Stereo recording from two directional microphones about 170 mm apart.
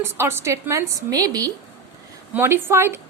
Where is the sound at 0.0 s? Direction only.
15° right (ahead or behind).